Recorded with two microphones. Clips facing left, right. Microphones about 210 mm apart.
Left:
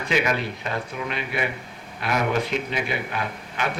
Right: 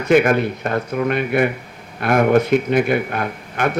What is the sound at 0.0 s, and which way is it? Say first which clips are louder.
Speech: right 10 dB; 50° right (ahead or behind).